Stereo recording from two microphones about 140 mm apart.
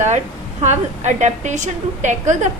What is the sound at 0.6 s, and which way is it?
A woman's voice, 55° right (ahead or behind).